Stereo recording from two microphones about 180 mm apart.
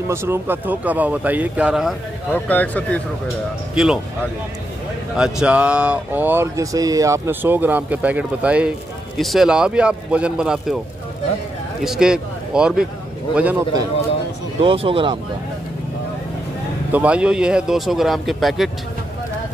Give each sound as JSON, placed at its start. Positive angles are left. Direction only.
{"t": 0.1, "sound": "speech", "side_deg": -15}
{"t": 2.3, "sound": "speech", "side_deg": 10}
{"t": 3.7, "sound": "a man's voice", "side_deg": -5}
{"t": 5.1, "sound": "a man's voice", "side_deg": -5}
{"t": 11.8, "sound": "speech", "side_deg": -5}
{"t": 14.6, "sound": "speech", "side_deg": -30}
{"t": 16.9, "sound": "a man's voice", "side_deg": -5}